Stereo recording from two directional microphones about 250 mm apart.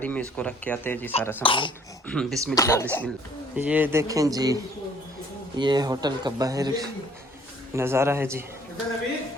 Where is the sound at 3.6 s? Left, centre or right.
Centre.